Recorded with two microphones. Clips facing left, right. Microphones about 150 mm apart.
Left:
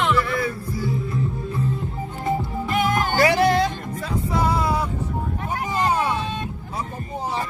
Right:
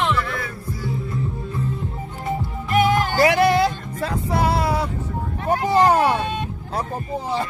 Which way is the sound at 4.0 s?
75° right (ahead or behind).